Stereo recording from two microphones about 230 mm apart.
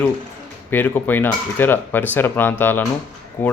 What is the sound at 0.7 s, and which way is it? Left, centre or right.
Speech, centre.